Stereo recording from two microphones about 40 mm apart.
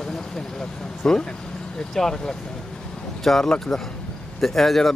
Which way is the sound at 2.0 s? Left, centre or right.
Centre.